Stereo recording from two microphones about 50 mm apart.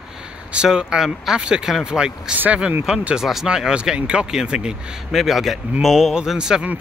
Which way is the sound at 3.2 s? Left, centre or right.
Centre.